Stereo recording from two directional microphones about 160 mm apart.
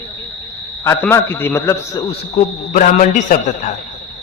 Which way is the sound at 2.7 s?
50° left (ahead or behind).